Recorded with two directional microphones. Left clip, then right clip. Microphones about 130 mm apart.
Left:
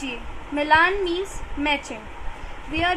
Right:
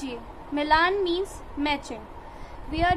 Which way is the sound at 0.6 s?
15° left (ahead or behind).